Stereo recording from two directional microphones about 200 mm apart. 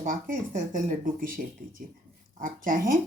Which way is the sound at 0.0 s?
40° right (ahead or behind).